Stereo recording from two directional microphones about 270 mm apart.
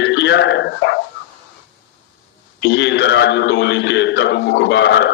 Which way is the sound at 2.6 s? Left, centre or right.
Left.